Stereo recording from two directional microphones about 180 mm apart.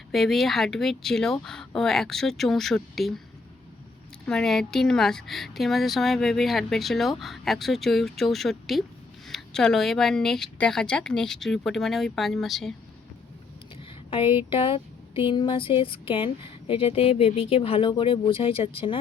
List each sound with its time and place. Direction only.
0.1 s speech: centre (ahead or behind)
4.3 s speech: 5° left (ahead or behind)
14.1 s speech: 30° left (ahead or behind)